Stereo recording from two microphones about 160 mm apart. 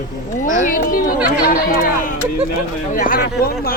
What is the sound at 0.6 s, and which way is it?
Speech, 60° left (ahead or behind).